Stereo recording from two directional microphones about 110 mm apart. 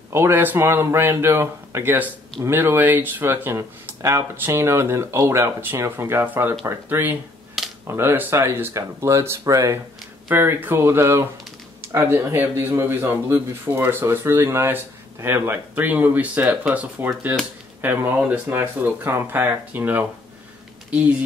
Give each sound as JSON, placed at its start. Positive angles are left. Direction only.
{"t": 0.1, "sound": "a man's voice", "side_deg": -20}